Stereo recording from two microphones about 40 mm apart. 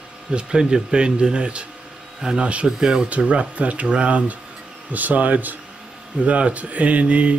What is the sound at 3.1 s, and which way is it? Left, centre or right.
Speech, right.